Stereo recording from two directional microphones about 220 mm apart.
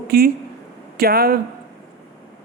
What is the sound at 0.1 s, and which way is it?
Speech, 45° right (ahead or behind).